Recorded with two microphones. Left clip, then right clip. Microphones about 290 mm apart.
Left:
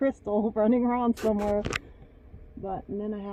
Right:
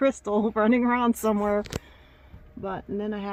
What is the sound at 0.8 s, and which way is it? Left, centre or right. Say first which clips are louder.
Speech: right 3 dB; right.